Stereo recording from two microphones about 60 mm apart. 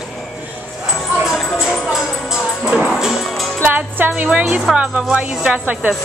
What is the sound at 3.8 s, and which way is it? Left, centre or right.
Music, right.